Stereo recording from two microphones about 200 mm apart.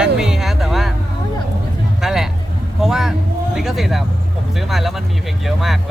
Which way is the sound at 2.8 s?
Centre (ahead or behind).